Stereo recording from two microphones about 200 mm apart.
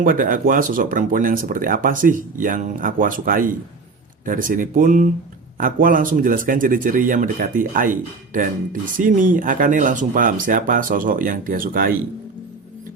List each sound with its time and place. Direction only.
0.0 s speech: 45° right (ahead or behind)